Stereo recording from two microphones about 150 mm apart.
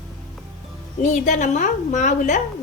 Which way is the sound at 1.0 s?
55° left (ahead or behind).